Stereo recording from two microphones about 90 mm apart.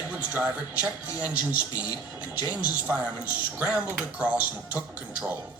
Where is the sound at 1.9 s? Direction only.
45° left (ahead or behind).